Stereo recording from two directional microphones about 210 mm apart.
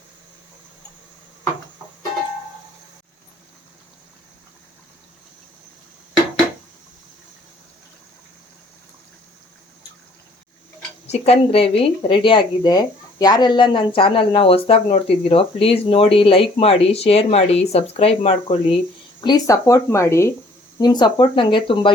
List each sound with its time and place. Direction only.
11.0 s speech: 30° left (ahead or behind)